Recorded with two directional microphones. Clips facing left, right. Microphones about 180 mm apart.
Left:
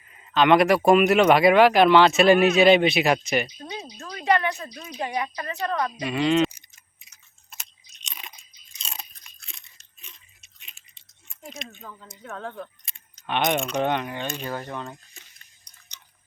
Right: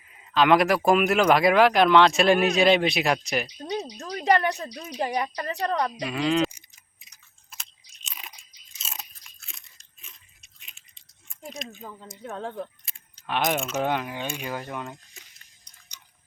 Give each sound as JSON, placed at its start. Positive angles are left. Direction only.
{"t": 0.0, "sound": "speech", "side_deg": -5}
{"t": 3.9, "sound": "a sound", "side_deg": -35}
{"t": 4.9, "sound": "a woman's voice", "side_deg": -35}
{"t": 6.0, "sound": "speech", "side_deg": 0}
{"t": 8.0, "sound": "crunch", "side_deg": -5}
{"t": 12.4, "sound": "speech", "side_deg": -30}
{"t": 12.9, "sound": "keys jangling", "side_deg": -5}
{"t": 13.2, "sound": "speech", "side_deg": 0}